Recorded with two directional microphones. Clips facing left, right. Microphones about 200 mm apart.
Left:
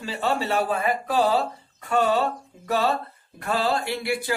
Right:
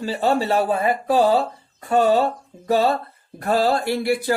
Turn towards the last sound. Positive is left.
turn(degrees=-40)  # may be behind; listen again after turning